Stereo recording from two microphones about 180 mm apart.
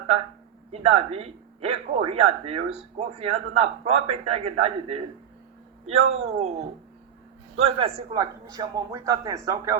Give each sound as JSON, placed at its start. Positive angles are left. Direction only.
{"t": 0.7, "sound": "a man's voice", "side_deg": -35}
{"t": 8.2, "sound": "speech", "side_deg": -20}